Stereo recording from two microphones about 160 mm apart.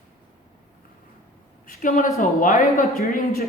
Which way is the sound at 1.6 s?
60° left (ahead or behind).